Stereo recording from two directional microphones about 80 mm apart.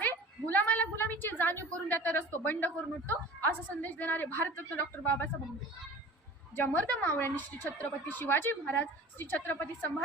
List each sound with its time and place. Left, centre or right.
0.0 s a woman's voice: left
6.6 s a woman's voice: centre